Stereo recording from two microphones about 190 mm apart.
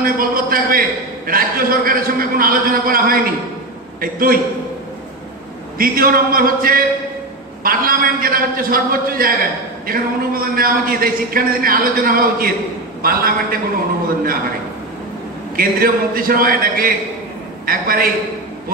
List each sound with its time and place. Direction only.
0.0 s a man's voice: 50° right (ahead or behind)
5.8 s a man's voice: 50° right (ahead or behind)
15.5 s a man's voice: 50° right (ahead or behind)